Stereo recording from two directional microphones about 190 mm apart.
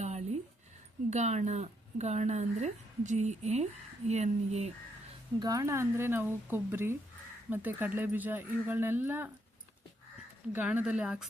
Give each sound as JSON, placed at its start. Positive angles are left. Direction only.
{"t": 0.0, "sound": "music", "side_deg": -35}
{"t": 1.1, "sound": "speech", "side_deg": -35}
{"t": 5.4, "sound": "speech", "side_deg": -20}
{"t": 10.5, "sound": "speech", "side_deg": -10}